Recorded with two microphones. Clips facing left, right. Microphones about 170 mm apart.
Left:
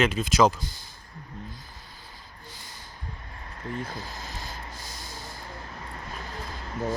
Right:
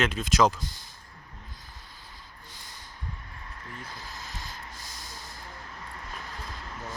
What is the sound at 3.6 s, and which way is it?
Speech, 40° left (ahead or behind).